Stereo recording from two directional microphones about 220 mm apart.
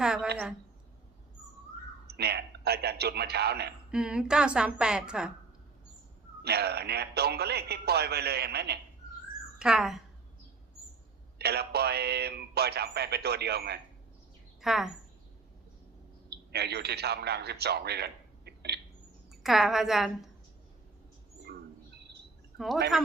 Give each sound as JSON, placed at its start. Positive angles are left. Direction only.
{"t": 0.0, "sound": "a sound", "side_deg": -5}
{"t": 2.0, "sound": "a man's voice", "side_deg": -45}
{"t": 3.9, "sound": "a woman's voice", "side_deg": -5}
{"t": 6.4, "sound": "speech", "side_deg": -45}
{"t": 9.6, "sound": "a woman's voice", "side_deg": -5}
{"t": 11.3, "sound": "speech", "side_deg": -45}
{"t": 14.6, "sound": "a woman's voice", "side_deg": 0}
{"t": 16.3, "sound": "a man's voice", "side_deg": -50}
{"t": 19.3, "sound": "a woman's voice", "side_deg": 0}
{"t": 21.5, "sound": "bird", "side_deg": -45}
{"t": 22.5, "sound": "speech", "side_deg": 0}